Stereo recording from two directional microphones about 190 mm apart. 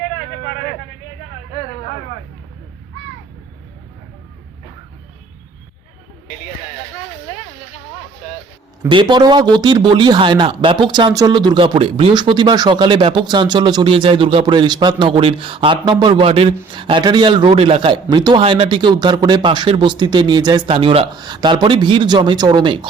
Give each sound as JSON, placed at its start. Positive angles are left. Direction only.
{"t": 8.9, "sound": "a man's voice", "side_deg": -25}